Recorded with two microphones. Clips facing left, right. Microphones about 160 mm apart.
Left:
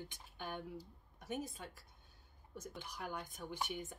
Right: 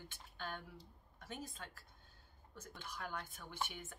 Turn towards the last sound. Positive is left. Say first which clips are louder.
# left 3 dB
turn(degrees=15)  # may be behind; listen again after turning